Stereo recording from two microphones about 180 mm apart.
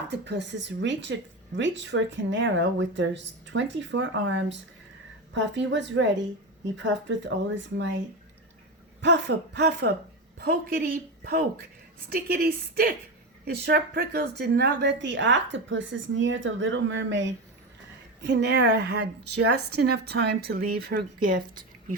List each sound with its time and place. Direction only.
0.1 s speech: 75° right (ahead or behind)
9.0 s speech: 75° right (ahead or behind)
10.3 s a woman's voice: 60° right (ahead or behind); by 17.3 s 90° right
18.2 s a woman's voice: 75° right (ahead or behind); by 21.9 s 50° right (ahead or behind)